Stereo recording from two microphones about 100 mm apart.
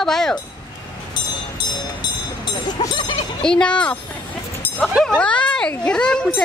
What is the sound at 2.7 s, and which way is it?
Speech, 45° left (ahead or behind).